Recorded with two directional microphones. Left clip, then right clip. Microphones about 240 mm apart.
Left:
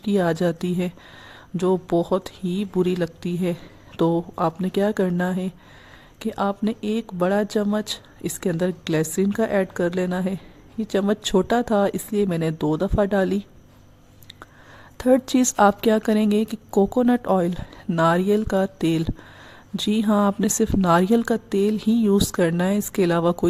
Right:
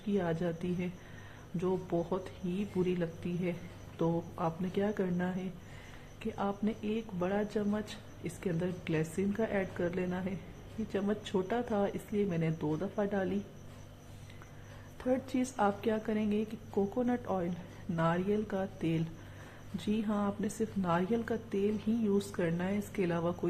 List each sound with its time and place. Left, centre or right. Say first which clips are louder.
0.1 s speech: left 13 dB; left
14.9 s speech: left 15 dB; left